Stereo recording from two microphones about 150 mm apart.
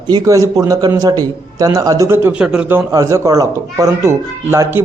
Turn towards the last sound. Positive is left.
turn(degrees=-15)  # may be behind; listen again after turning